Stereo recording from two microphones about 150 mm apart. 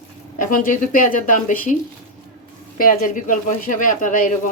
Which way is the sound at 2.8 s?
70° left (ahead or behind).